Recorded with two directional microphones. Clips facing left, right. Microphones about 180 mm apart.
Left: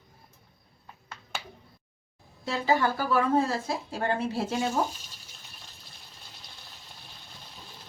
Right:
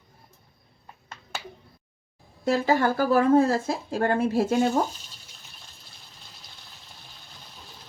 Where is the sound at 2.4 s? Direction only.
50° right (ahead or behind).